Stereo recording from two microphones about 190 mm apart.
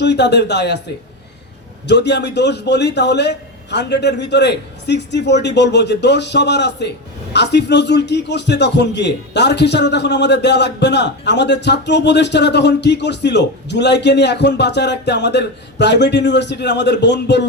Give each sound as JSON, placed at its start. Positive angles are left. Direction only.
{"t": 0.0, "sound": "a man's voice", "side_deg": 65}
{"t": 1.9, "sound": "a man's voice", "side_deg": 65}